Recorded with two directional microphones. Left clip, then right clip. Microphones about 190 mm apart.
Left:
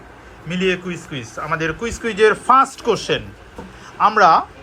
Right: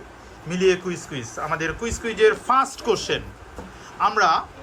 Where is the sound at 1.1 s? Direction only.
Centre (ahead or behind).